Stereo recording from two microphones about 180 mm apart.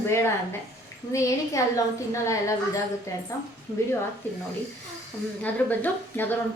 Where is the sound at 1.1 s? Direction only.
15° left (ahead or behind).